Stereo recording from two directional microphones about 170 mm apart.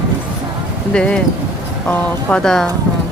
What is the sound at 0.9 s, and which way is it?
Speech, 5° left (ahead or behind).